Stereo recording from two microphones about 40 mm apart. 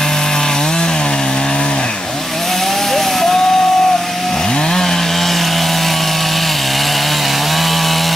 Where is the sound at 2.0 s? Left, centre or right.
Centre.